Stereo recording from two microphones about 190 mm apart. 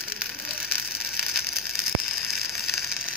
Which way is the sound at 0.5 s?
5° right (ahead or behind).